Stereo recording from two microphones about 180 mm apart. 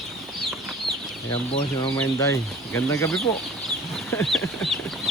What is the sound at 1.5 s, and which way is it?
Speech, 30° left (ahead or behind).